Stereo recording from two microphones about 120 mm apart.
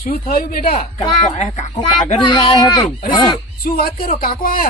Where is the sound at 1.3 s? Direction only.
80° left.